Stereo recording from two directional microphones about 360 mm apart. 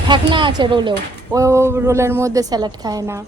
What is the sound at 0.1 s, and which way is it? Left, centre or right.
A man's voice, centre.